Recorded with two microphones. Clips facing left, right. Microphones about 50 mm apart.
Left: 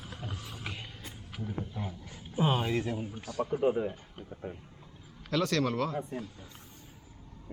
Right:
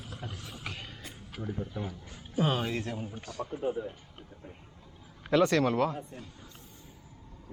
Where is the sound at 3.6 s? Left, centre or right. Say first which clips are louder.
Left 4 dB; left.